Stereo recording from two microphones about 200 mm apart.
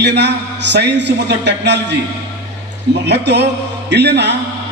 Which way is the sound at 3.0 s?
60° right (ahead or behind).